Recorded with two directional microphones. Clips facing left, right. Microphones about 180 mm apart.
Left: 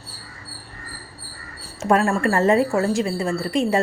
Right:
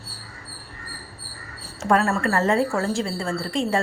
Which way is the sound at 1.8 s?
15° left (ahead or behind).